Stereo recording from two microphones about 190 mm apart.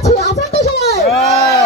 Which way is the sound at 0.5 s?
35° left (ahead or behind).